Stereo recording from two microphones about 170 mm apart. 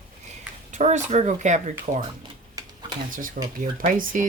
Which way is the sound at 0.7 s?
45° right (ahead or behind).